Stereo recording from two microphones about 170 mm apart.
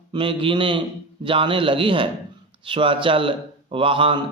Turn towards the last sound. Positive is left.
turn(degrees=-30)  # may be behind; listen again after turning